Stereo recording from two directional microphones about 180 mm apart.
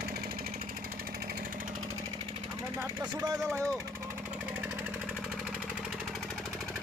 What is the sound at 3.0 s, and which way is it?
Speech, 20° right (ahead or behind).